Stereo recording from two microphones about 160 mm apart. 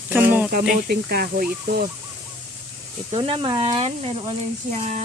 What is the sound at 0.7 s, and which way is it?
Speech, 75° right (ahead or behind).